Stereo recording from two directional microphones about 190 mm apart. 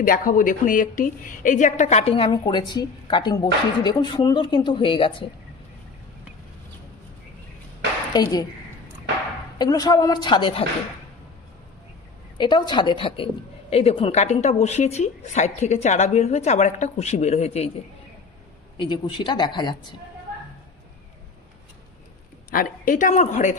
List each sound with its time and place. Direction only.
0.0 s a woman's voice: 45° left (ahead or behind); by 5.1 s 25° left (ahead or behind)
8.1 s a woman's voice: 20° left (ahead or behind)
9.6 s a woman's voice: 20° left (ahead or behind)
12.4 s a woman's voice: 25° left (ahead or behind)
18.8 s a woman's voice: 25° left (ahead or behind)
22.5 s a woman's voice: 45° left (ahead or behind)